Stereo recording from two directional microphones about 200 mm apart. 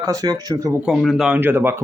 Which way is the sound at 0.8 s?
Centre (ahead or behind).